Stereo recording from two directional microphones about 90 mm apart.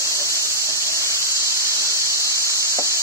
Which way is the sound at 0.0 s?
35° left (ahead or behind).